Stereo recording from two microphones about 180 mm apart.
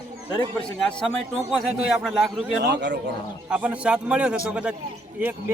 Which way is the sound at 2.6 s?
70° right (ahead or behind).